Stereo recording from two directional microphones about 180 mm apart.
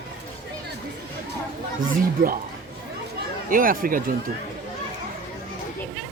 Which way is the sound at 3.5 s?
50° right (ahead or behind).